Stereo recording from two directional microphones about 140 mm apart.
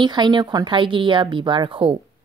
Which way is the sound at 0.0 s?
35° right (ahead or behind).